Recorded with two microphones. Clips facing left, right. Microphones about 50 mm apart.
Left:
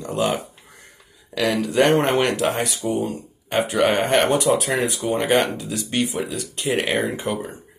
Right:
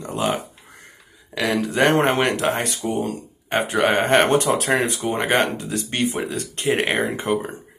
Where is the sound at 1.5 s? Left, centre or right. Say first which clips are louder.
Even; right.